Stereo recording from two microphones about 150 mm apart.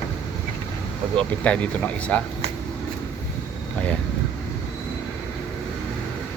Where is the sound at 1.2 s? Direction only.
10° left (ahead or behind).